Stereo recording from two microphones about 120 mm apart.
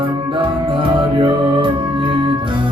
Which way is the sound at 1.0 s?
45° right (ahead or behind).